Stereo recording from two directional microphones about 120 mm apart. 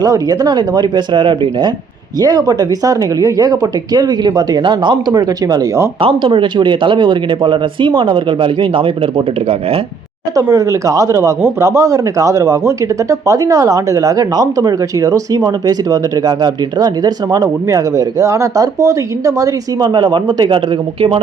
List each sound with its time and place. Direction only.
0.0 s speech: 30° right (ahead or behind)
6.0 s speech: 50° right (ahead or behind)
10.3 s speech: 25° right (ahead or behind)